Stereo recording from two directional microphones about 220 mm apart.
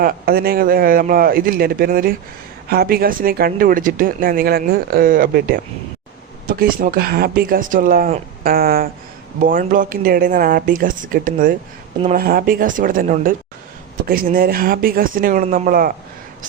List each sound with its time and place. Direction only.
0.0 s speech: 45° right (ahead or behind)